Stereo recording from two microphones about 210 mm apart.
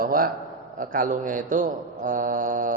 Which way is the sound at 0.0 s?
45° right (ahead or behind).